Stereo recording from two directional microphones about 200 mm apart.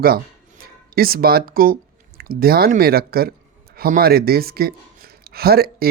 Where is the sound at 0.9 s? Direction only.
50° right (ahead or behind).